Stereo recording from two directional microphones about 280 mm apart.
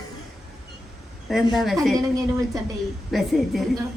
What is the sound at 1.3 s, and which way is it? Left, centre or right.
Music, centre.